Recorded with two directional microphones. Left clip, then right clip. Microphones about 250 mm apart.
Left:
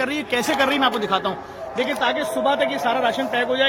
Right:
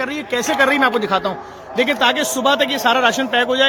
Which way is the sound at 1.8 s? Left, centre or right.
Right.